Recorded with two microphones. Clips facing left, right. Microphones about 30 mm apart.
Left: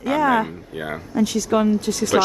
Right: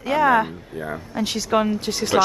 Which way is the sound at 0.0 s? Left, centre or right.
Centre.